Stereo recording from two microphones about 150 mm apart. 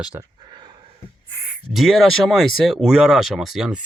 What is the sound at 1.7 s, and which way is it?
Speech, centre (ahead or behind).